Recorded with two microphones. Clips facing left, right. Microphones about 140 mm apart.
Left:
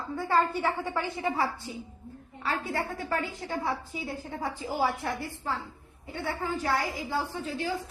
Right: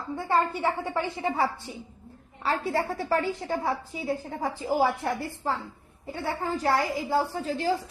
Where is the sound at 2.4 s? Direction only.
35° right (ahead or behind).